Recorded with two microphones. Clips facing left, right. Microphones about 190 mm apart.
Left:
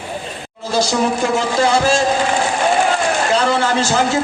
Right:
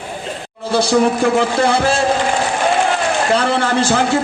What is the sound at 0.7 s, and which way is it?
A woman's voice, 60° right (ahead or behind).